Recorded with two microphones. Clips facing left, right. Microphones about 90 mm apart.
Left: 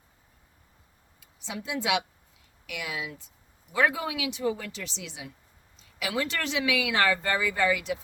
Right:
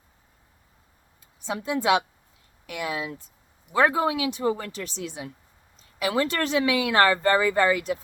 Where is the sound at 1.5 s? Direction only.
45° right (ahead or behind).